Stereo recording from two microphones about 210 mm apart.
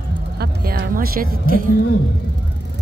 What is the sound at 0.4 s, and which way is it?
Music, 50° right (ahead or behind).